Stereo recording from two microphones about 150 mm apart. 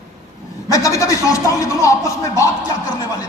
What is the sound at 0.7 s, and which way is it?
Speech, 20° left (ahead or behind).